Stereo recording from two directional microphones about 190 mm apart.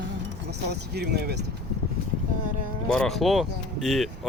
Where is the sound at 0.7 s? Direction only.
60° right (ahead or behind).